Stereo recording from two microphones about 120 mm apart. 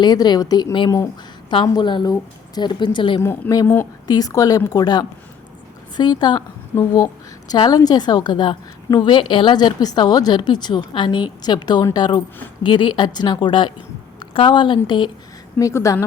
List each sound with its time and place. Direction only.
0.0 s a woman's voice: 35° left (ahead or behind)
3.2 s a woman's voice: 20° left (ahead or behind); by 15.1 s 45° left (ahead or behind)
15.5 s a woman's voice: 25° left (ahead or behind)